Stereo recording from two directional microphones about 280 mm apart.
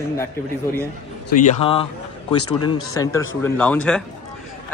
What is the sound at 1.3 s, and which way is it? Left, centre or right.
Speech, left.